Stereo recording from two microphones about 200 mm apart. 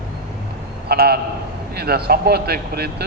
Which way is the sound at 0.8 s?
50° right (ahead or behind).